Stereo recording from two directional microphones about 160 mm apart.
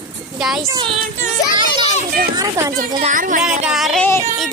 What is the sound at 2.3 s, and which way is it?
Speech, 20° right (ahead or behind).